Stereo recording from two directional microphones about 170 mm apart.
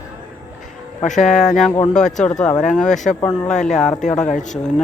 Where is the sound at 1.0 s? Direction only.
45° left (ahead or behind).